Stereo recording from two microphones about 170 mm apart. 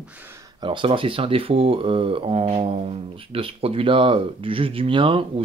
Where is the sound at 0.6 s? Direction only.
30° right (ahead or behind).